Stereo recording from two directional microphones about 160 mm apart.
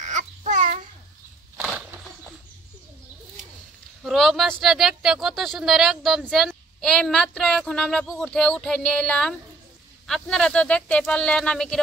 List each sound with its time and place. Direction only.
0.0 s babbling: 50° right (ahead or behind)
1.6 s a sound: 5° right (ahead or behind)
4.0 s speech: centre (ahead or behind)